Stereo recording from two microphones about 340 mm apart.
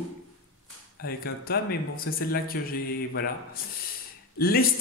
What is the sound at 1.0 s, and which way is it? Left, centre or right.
Mantra, left.